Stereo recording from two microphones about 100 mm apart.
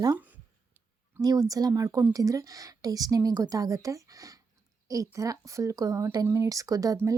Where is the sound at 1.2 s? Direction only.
40° right (ahead or behind).